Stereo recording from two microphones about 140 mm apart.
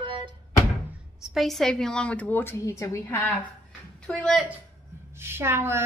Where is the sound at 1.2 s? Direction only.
Centre (ahead or behind); by 3.3 s 20° left (ahead or behind).